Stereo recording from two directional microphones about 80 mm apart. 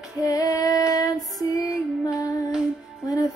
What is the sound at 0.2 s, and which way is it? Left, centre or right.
Female singing, left.